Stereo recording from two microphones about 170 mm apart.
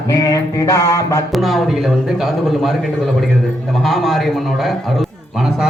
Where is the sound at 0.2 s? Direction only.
20° left (ahead or behind).